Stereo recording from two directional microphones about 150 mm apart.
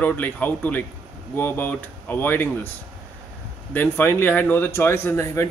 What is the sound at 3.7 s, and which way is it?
Speech, 10° left (ahead or behind).